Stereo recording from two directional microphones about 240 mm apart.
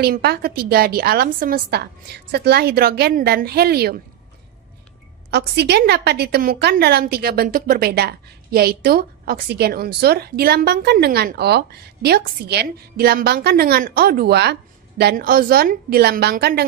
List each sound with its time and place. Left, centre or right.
0.0 s a woman's voice: right
5.3 s a woman's voice: right